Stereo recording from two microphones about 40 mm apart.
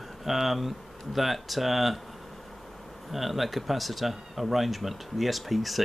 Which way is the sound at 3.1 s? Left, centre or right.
Centre.